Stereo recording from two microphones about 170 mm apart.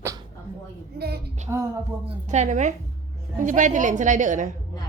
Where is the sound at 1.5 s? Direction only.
20° right (ahead or behind).